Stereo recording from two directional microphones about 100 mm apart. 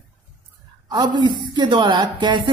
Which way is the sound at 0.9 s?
45° right (ahead or behind).